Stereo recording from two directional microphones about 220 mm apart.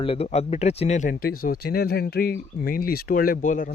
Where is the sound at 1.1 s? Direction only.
45° left (ahead or behind).